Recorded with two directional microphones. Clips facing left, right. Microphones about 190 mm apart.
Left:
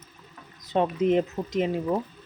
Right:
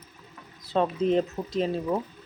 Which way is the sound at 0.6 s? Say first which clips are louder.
Left 1 dB; 20° left (ahead or behind).